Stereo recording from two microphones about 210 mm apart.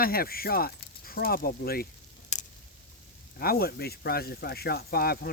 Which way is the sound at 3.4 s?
45° left (ahead or behind).